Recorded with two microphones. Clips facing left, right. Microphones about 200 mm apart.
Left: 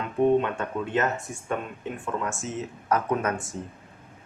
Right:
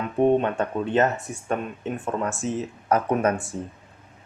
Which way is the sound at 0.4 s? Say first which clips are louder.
Right 4 dB; 35° right (ahead or behind).